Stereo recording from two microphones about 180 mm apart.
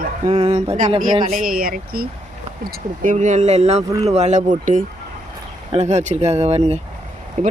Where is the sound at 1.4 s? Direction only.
50° right (ahead or behind).